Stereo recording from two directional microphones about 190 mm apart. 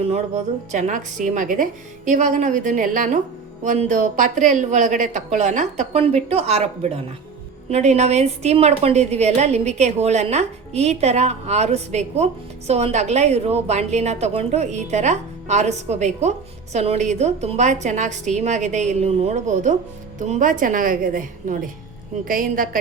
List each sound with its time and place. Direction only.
0.0 s a woman's voice: 35° right (ahead or behind)